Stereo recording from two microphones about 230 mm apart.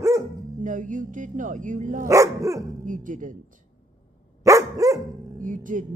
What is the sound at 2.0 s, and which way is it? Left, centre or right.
Dog, centre.